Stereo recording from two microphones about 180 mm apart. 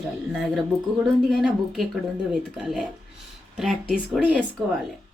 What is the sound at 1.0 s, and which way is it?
A woman's voice, centre (ahead or behind).